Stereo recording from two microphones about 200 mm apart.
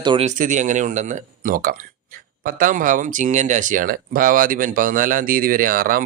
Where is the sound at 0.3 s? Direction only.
40° right (ahead or behind).